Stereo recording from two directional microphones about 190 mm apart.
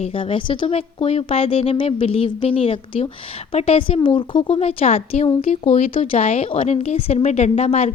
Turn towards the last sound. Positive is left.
turn(degrees=35)  # may be behind; listen again after turning